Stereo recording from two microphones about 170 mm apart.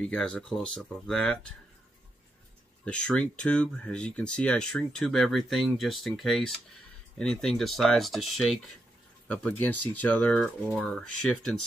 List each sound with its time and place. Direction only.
0.0 s speech: 5° left (ahead or behind)
2.8 s speech: 5° left (ahead or behind)